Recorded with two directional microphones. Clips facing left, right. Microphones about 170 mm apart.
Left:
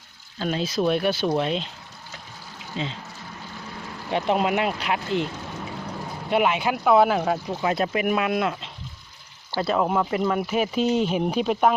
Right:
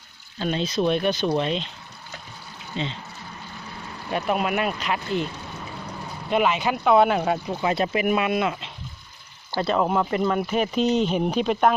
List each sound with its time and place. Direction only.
0.3 s speech: 5° left (ahead or behind)
2.7 s speech: 5° left (ahead or behind)
4.1 s speech: 20° left (ahead or behind)
6.3 s speech: 10° left (ahead or behind)